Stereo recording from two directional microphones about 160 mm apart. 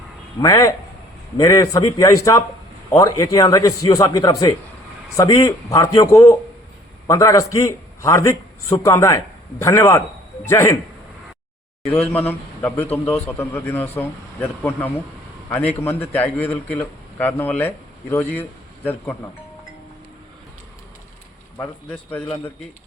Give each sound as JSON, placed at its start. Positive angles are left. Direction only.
{"t": 0.4, "sound": "a man's voice", "side_deg": 20}
{"t": 12.1, "sound": "a man's voice", "side_deg": 10}
{"t": 21.6, "sound": "a man's voice", "side_deg": 10}